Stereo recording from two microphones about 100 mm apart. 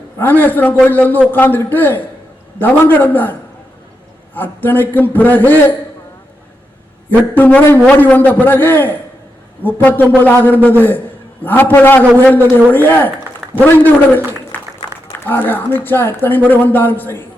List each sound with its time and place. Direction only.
0.2 s speech: 20° left (ahead or behind)
4.4 s speech: 20° left (ahead or behind)
7.1 s a man's voice: 20° left (ahead or behind)
15.3 s speech: 20° left (ahead or behind)